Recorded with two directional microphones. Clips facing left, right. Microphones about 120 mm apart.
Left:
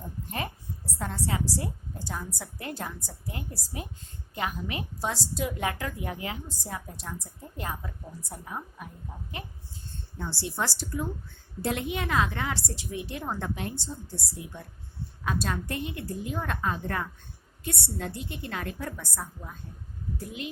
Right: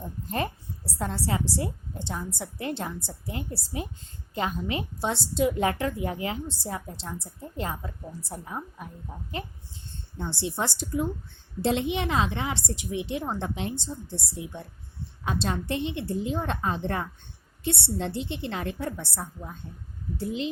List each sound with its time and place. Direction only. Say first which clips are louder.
0.9 s a woman's voice: right 3 dB; 30° right (ahead or behind)
10.2 s a woman's voice: right 2 dB; 20° right (ahead or behind)